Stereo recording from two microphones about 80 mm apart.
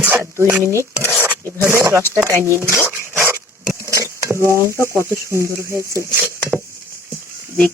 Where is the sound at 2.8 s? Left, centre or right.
Right.